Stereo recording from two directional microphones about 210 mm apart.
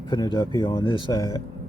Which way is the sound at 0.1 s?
20° left (ahead or behind).